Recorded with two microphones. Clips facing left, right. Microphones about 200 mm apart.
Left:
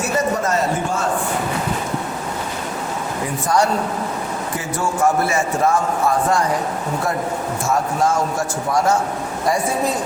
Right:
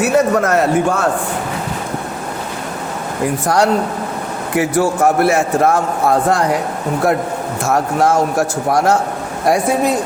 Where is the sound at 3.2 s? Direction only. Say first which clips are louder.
Right 4 dB; 65° right (ahead or behind).